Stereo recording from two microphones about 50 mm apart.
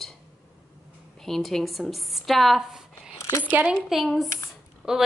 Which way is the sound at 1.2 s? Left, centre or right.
Centre.